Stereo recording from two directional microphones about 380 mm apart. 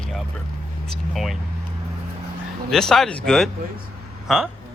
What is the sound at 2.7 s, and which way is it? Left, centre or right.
A man's voice, centre.